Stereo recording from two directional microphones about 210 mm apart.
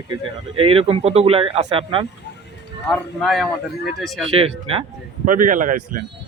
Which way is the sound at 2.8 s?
Centre (ahead or behind).